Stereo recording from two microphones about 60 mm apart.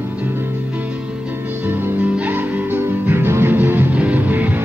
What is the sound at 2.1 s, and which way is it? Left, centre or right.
Music, right.